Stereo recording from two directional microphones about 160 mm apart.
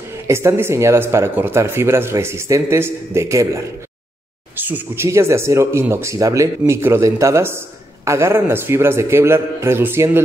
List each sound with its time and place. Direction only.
0.3 s speech: 15° right (ahead or behind)